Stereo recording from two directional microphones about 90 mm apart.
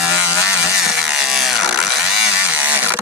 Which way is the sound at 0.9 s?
5° right (ahead or behind).